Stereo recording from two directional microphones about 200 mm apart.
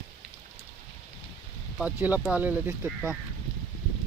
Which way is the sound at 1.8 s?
5° right (ahead or behind).